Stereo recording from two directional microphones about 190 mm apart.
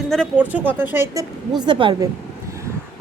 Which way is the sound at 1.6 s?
25° right (ahead or behind).